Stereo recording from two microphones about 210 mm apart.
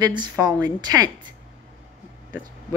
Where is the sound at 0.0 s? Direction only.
20° right (ahead or behind).